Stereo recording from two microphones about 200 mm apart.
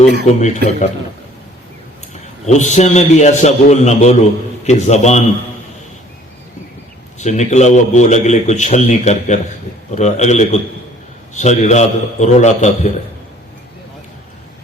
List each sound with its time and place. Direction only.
0.3 s a man's voice: 35° left (ahead or behind)
2.5 s a man's voice: 35° left (ahead or behind)
7.2 s a man's voice: 35° left (ahead or behind)